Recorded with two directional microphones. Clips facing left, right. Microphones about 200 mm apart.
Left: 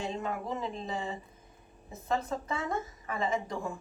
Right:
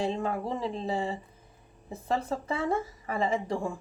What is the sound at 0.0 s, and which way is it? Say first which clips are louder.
Speech: right 5 dB; 30° right (ahead or behind).